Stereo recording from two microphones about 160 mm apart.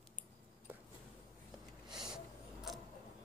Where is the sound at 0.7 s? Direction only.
15° right (ahead or behind).